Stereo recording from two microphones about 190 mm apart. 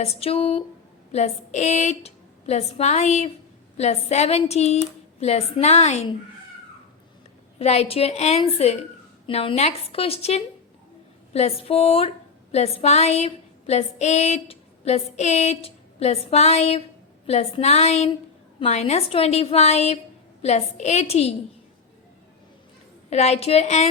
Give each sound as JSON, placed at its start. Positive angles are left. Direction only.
{"t": 0.0, "sound": "speech", "side_deg": 30}
{"t": 7.6, "sound": "a woman's voice", "side_deg": 35}
{"t": 23.0, "sound": "speech", "side_deg": 35}